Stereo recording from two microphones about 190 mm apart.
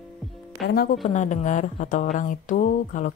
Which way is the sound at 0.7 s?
55° left (ahead or behind).